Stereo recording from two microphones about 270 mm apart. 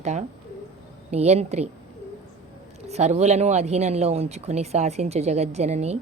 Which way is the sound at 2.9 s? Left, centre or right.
Right.